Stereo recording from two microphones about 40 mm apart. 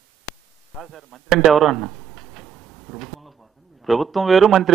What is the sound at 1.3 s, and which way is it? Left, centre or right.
Tick-tock, centre.